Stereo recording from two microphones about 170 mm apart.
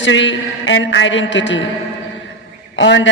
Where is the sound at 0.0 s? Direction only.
90° left.